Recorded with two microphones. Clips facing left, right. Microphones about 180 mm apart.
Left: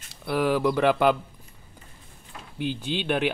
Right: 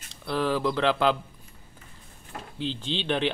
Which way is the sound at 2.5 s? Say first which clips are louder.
Left 3 dB; 10° left (ahead or behind).